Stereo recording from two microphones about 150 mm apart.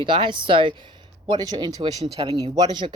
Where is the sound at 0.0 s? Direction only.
30° right (ahead or behind).